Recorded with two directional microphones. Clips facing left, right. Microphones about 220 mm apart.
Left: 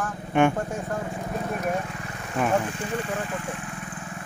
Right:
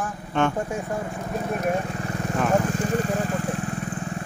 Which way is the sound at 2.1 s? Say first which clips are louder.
Right 2 dB; 40° right (ahead or behind).